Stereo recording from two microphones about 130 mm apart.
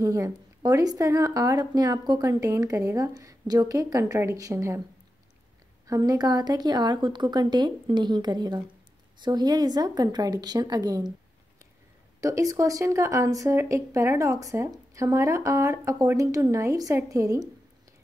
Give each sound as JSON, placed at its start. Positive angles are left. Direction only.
{"t": 0.0, "sound": "speech", "side_deg": -25}
{"t": 5.9, "sound": "speech", "side_deg": -30}
{"t": 12.2, "sound": "speech", "side_deg": -25}